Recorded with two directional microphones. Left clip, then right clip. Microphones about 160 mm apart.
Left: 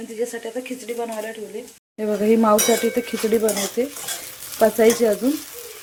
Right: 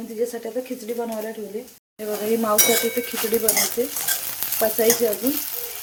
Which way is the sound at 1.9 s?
40° left (ahead or behind).